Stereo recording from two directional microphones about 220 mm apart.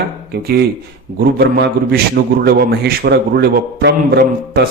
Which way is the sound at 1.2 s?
50° right (ahead or behind).